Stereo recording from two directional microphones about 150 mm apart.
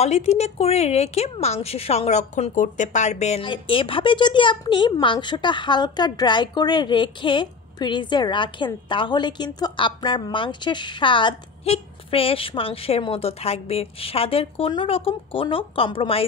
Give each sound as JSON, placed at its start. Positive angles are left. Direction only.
{"t": 0.0, "sound": "a woman's voice", "side_deg": 45}
{"t": 3.4, "sound": "speech", "side_deg": 35}